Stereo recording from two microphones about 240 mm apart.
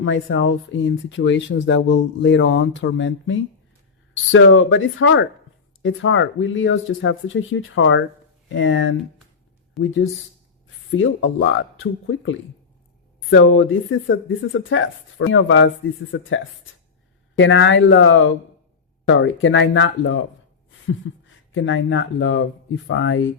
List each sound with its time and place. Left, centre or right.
0.0 s speech: left
17.3 s speech: left